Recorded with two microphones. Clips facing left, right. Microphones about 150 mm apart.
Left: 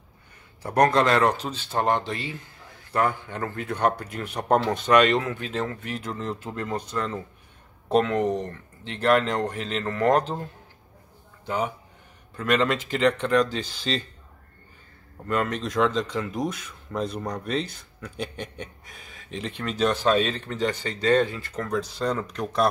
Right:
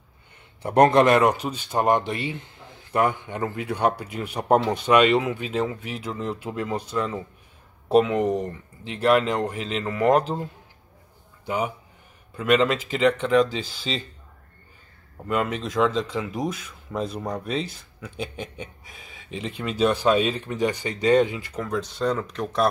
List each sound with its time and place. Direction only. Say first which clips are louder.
0.6 s speech: right 4 dB; 25° right (ahead or behind); by 14.0 s centre (ahead or behind)
15.2 s speech: right 1 dB; 5° right (ahead or behind)